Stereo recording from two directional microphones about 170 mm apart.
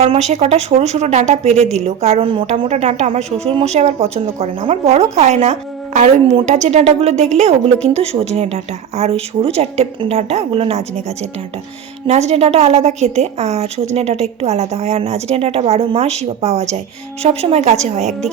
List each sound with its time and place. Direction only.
0.0 s a woman's voice: 40° right (ahead or behind)
12.0 s a woman's voice: 40° right (ahead or behind)